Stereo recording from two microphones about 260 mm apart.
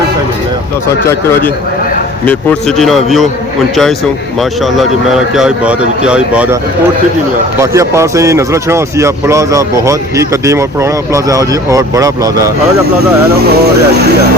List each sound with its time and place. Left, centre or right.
2.2 s speech: centre
4.4 s speech: centre
7.6 s speech: centre
13.5 s speech: right